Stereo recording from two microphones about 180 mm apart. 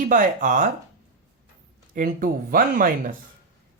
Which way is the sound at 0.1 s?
45° right (ahead or behind).